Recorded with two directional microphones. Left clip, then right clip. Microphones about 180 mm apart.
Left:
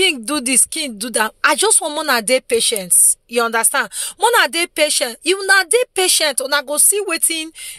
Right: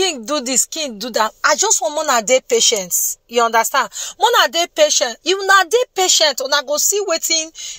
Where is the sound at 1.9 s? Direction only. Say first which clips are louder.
Right 1 dB; 35° left (ahead or behind).